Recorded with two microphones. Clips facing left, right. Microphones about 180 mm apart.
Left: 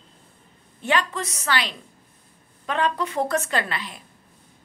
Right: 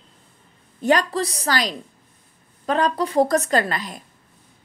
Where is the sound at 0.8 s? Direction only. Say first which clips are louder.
Right 5 dB; 40° right (ahead or behind).